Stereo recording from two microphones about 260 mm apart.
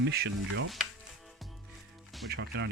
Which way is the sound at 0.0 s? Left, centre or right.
Right.